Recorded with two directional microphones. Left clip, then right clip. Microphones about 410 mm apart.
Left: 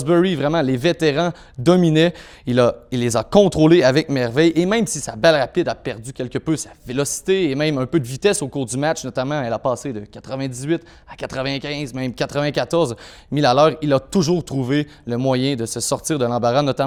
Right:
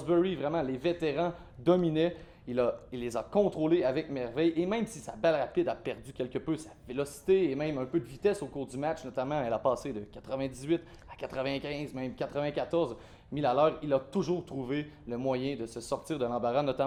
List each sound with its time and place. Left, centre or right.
0.0 s a man's voice: left